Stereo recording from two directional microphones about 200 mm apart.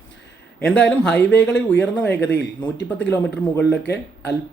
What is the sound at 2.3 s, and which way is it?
Speech, 60° left (ahead or behind).